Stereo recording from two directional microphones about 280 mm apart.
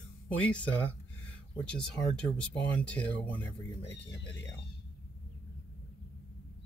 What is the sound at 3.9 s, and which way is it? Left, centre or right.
Speech, left.